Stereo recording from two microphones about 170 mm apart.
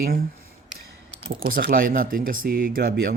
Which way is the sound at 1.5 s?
55° right (ahead or behind).